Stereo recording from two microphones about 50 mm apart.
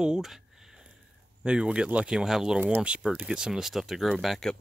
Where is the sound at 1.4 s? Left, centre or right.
Centre.